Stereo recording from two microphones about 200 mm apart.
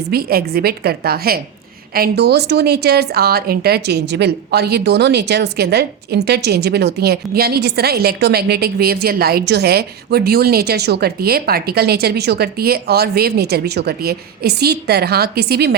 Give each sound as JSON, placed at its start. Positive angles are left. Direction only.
{"t": 0.1, "sound": "a woman's voice", "side_deg": -50}